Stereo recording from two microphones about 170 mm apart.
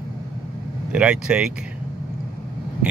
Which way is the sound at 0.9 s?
5° right (ahead or behind).